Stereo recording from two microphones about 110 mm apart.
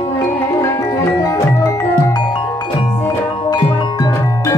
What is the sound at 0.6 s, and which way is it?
Music, 30° left (ahead or behind).